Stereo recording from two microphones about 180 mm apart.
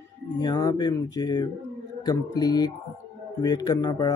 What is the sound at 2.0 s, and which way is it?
A man's voice, 20° left (ahead or behind).